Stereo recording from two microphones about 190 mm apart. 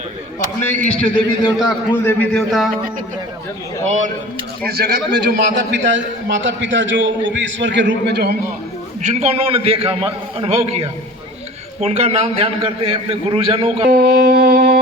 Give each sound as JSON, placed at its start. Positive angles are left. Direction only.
{"t": 1.1, "sound": "a man's voice", "side_deg": 25}
{"t": 1.6, "sound": "a man's voice", "side_deg": 10}
{"t": 3.8, "sound": "a man's voice", "side_deg": -40}
{"t": 4.6, "sound": "a man's voice", "side_deg": -55}
{"t": 9.0, "sound": "a man's voice", "side_deg": -35}
{"t": 13.9, "sound": "wind instrument", "side_deg": -55}